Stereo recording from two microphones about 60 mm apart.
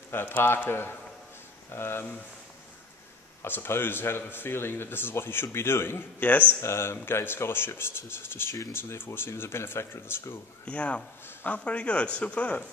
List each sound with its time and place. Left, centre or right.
0.1 s speech: left
3.4 s speech: left
6.6 s speech: left
10.6 s a man's voice: left